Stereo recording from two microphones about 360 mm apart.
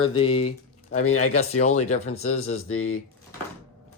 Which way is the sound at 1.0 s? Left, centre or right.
Left.